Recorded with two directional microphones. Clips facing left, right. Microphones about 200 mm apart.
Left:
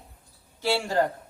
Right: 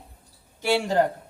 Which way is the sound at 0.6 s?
15° right (ahead or behind).